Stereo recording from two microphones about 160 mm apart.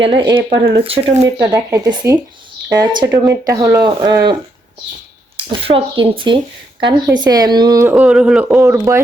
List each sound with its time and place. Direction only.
0.0 s speech: 30° right (ahead or behind)
1.2 s speech: 20° right (ahead or behind)
5.5 s speech: 35° right (ahead or behind)
7.9 s a man's voice: 5° right (ahead or behind)